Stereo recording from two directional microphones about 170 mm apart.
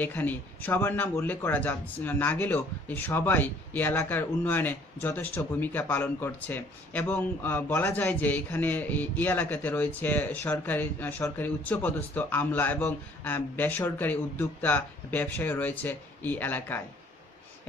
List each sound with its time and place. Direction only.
0.0 s speech: 10° left (ahead or behind)